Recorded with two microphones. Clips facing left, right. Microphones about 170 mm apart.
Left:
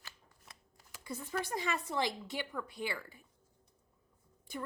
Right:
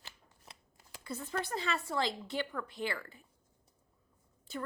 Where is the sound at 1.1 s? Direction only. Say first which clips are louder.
Right 1 dB; 15° left (ahead or behind).